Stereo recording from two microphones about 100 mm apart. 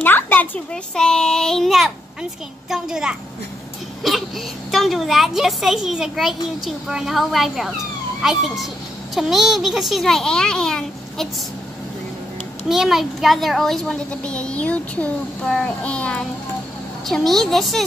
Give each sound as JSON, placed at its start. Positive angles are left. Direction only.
{"t": 0.0, "sound": "a sound", "side_deg": 20}
{"t": 0.9, "sound": "a child's voice", "side_deg": 5}
{"t": 12.6, "sound": "a child's voice", "side_deg": -5}
{"t": 15.5, "sound": "child singing", "side_deg": 10}
{"t": 17.0, "sound": "a child's voice", "side_deg": 0}